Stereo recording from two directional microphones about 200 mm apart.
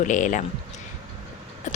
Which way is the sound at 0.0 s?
40° left (ahead or behind).